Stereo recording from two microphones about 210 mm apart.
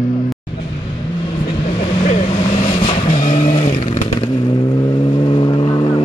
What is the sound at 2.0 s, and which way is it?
Vehicle, 30° left (ahead or behind).